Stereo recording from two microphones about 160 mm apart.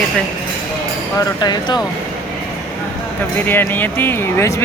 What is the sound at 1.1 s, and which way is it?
Speech, 25° left (ahead or behind).